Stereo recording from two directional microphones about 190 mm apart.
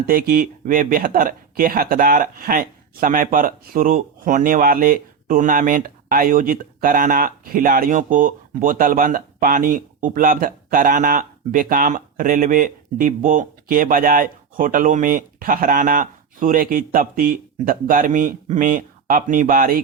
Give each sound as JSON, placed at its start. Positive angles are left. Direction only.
{"t": 0.0, "sound": "speech", "side_deg": -50}